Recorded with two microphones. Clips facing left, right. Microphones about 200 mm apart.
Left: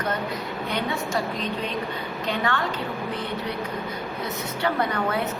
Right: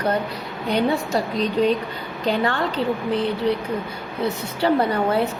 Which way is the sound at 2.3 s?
35° right (ahead or behind).